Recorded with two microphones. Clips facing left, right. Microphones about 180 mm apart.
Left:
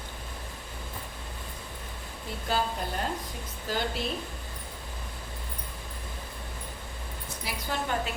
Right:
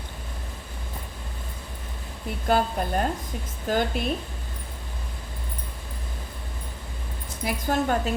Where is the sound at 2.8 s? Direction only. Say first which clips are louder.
Right 6 dB; 55° right (ahead or behind).